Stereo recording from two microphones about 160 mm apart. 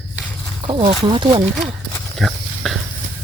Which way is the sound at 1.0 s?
35° right (ahead or behind).